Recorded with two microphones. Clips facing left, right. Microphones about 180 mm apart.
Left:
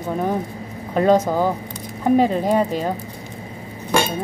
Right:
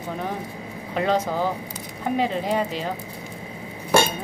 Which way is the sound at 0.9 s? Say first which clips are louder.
Left 7 dB; 45° left (ahead or behind).